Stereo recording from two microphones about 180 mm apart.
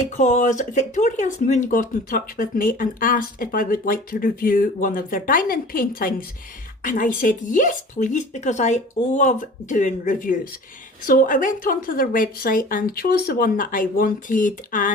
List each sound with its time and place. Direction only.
0.1 s speech: 40° left (ahead or behind)